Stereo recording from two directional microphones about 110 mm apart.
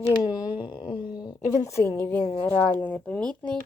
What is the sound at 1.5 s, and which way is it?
Speech, 25° left (ahead or behind).